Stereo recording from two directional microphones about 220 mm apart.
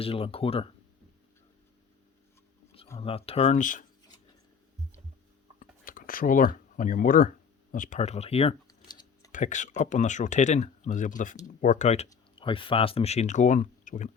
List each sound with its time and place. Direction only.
0.0 s speech: 25° left (ahead or behind)
3.0 s speech: 25° left (ahead or behind)
5.5 s a sound: 40° left (ahead or behind); by 9.3 s 20° left (ahead or behind)
9.3 s speech: 35° left (ahead or behind)